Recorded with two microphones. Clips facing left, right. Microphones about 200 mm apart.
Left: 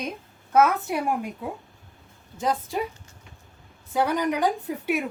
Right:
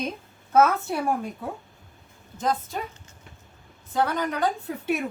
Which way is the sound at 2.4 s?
10° left (ahead or behind).